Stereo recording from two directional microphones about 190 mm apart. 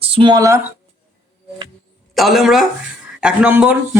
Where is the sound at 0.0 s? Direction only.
30° right (ahead or behind).